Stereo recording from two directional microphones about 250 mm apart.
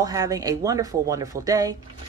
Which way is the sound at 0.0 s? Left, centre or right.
Centre.